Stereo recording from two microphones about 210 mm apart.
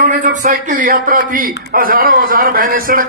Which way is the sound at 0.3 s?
40° right (ahead or behind).